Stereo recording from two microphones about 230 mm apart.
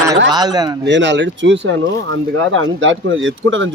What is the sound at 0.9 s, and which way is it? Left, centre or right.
Speech, right.